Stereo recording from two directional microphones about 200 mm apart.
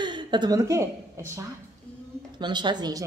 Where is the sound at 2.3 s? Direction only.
20° right (ahead or behind).